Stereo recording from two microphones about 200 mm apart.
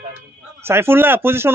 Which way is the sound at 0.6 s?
10° right (ahead or behind).